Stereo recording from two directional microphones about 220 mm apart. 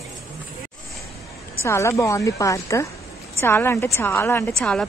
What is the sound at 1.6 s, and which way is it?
A woman's voice, 15° left (ahead or behind).